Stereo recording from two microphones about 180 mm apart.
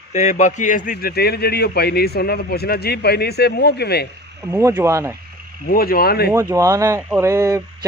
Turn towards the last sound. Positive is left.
turn(degrees=-20)  # may be behind; listen again after turning